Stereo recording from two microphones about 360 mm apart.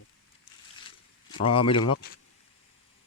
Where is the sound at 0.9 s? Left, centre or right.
Centre.